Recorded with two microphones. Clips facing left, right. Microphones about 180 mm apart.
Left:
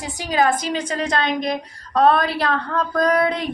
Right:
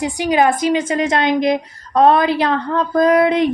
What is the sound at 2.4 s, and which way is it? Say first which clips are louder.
Speech: right 4 dB; 20° right (ahead or behind).